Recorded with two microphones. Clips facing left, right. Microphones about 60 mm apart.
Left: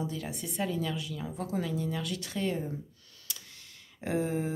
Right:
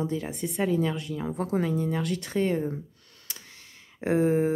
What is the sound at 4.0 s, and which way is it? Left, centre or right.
Speech, right.